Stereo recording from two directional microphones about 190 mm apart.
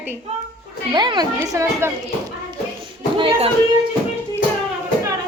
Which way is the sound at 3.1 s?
30° right (ahead or behind).